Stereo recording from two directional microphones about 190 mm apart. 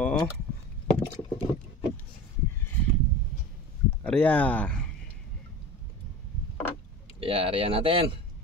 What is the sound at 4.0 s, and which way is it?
Speech, 5° left (ahead or behind).